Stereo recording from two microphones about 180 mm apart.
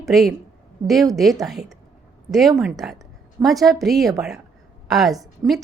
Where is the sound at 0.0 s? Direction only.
Centre (ahead or behind).